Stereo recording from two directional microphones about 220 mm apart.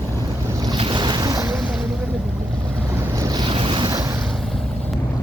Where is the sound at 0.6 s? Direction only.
20° right (ahead or behind).